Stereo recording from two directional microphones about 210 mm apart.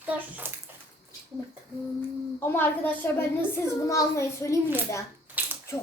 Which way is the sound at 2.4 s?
10° left (ahead or behind).